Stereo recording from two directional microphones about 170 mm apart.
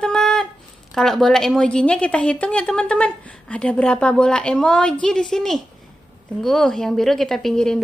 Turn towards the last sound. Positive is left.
turn(degrees=5)  # may be behind; listen again after turning